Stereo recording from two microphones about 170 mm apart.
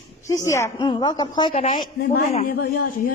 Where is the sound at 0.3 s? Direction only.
15° left (ahead or behind).